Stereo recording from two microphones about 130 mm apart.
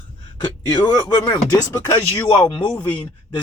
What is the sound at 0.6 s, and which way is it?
Speech, 30° left (ahead or behind).